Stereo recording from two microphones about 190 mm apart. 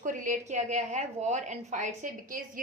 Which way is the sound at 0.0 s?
45° right (ahead or behind).